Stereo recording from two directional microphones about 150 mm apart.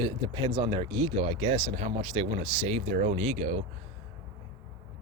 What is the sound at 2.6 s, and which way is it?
Speech, 50° right (ahead or behind).